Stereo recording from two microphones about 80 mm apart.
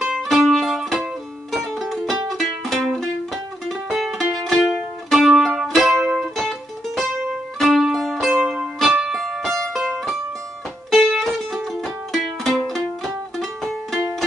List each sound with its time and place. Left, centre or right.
0.0 s music: centre
10.9 s music: centre